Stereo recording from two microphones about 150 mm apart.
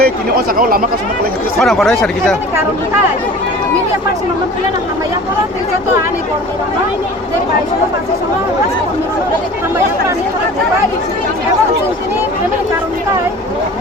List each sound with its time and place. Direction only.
0.0 s speech: 85° right
1.5 s speech: centre (ahead or behind)